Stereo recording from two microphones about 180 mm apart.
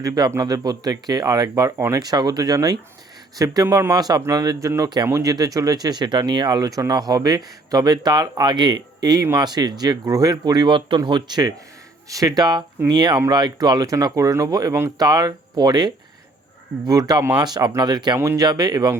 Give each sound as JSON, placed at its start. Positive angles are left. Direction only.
{"t": 0.0, "sound": "speech", "side_deg": -20}